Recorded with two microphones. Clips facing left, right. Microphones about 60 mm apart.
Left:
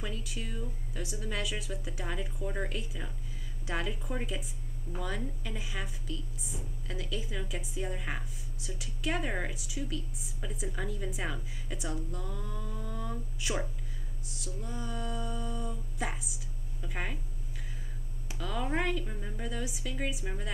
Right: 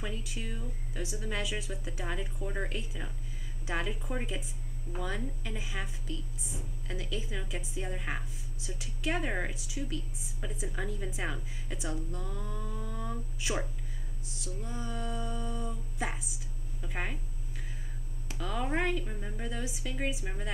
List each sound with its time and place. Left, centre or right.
0.0 s a woman's voice: centre
18.4 s speech: centre